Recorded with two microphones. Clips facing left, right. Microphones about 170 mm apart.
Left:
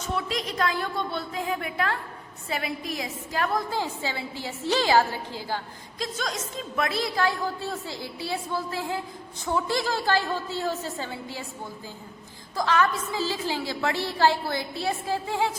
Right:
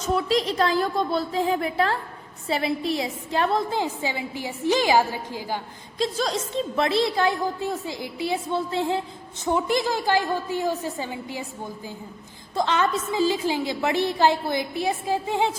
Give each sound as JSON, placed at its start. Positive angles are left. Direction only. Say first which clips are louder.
{"t": 0.3, "sound": "a woman's voice", "louder": "right 6 dB", "side_deg": -30}
{"t": 6.0, "sound": "a woman's voice", "louder": "right 6 dB", "side_deg": -30}